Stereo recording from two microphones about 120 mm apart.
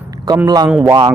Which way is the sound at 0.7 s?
10° right (ahead or behind).